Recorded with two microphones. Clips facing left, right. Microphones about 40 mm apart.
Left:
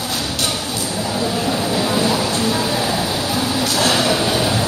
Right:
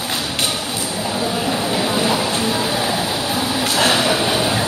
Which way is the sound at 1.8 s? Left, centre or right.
Right.